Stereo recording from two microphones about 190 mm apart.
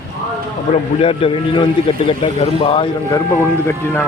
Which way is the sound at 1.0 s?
30° left (ahead or behind).